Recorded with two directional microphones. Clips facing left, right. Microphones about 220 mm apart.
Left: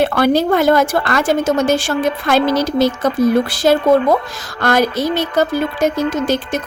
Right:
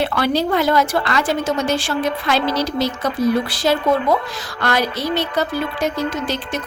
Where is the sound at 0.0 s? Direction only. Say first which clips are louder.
Left 5 dB; 50° left (ahead or behind).